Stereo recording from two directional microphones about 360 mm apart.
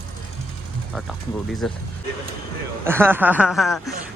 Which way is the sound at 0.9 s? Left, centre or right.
Centre.